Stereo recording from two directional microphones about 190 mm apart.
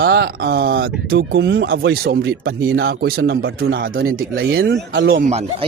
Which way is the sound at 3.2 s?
70° right (ahead or behind).